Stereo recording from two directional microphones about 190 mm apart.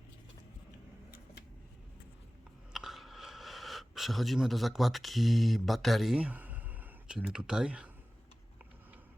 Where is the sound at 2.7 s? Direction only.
Centre (ahead or behind).